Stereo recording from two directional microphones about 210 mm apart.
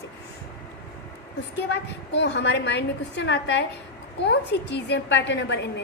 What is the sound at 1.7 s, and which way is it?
A woman's voice, 55° left (ahead or behind).